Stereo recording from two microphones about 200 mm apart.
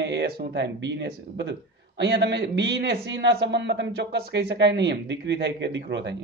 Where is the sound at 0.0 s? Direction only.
60° right (ahead or behind).